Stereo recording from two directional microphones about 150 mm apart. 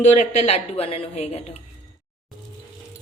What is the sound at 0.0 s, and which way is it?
A woman's voice, 50° left (ahead or behind).